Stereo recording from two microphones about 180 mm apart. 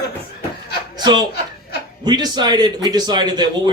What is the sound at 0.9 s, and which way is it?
Speech, 25° right (ahead or behind).